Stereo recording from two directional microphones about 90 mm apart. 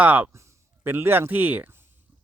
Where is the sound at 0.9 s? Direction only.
25° right (ahead or behind).